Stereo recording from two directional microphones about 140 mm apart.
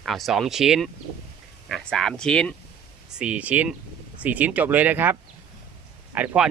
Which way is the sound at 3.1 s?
5° right (ahead or behind).